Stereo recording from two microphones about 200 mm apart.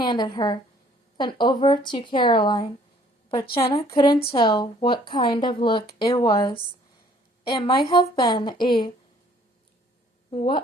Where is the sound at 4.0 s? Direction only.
25° left (ahead or behind).